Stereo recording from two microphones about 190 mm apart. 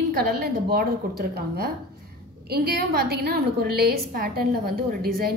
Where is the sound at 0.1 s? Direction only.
55° right (ahead or behind).